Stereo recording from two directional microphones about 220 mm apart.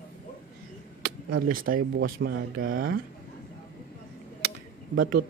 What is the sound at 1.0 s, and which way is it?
Speech, 45° right (ahead or behind).